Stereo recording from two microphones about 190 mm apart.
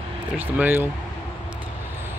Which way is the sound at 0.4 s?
10° right (ahead or behind).